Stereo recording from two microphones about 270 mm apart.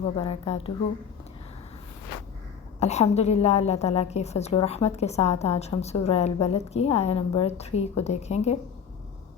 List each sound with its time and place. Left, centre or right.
0.0 s a woman's voice: left
2.8 s a woman's voice: left